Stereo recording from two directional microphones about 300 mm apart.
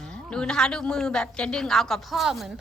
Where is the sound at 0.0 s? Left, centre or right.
Centre.